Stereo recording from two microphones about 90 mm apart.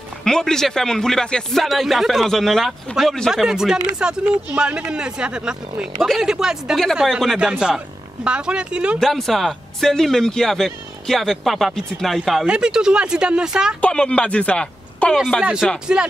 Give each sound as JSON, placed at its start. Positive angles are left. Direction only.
{"t": 0.2, "sound": "speech", "side_deg": 5}
{"t": 9.0, "sound": "speech", "side_deg": 0}
{"t": 12.4, "sound": "speech", "side_deg": -10}
{"t": 13.7, "sound": "speech", "side_deg": 15}
{"t": 15.4, "sound": "speech", "side_deg": -10}